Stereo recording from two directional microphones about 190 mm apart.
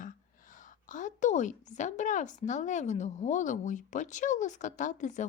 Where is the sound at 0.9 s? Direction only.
40° left (ahead or behind).